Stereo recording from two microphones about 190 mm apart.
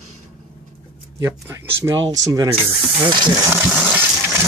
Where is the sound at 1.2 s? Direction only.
15° right (ahead or behind).